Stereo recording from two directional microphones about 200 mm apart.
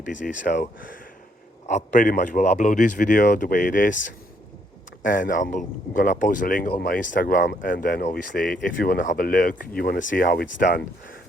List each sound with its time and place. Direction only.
0.0 s speech: 40° left (ahead or behind)